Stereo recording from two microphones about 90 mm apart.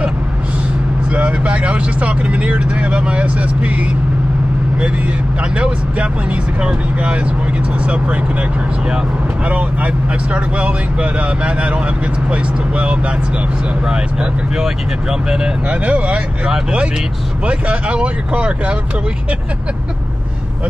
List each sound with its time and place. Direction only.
1.1 s speech: 15° right (ahead or behind)
6.6 s speech: 10° right (ahead or behind)
9.5 s speech: 15° right (ahead or behind)
14.6 s speech: 5° right (ahead or behind)